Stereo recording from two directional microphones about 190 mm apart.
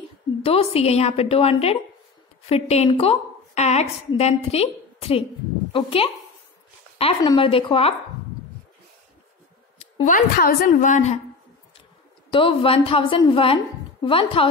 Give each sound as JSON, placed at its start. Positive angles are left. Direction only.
{"t": 0.4, "sound": "a woman's voice", "side_deg": 30}
{"t": 9.8, "sound": "a sound", "side_deg": 30}
{"t": 10.1, "sound": "a woman's voice", "side_deg": 45}
{"t": 12.3, "sound": "a woman's voice", "side_deg": 30}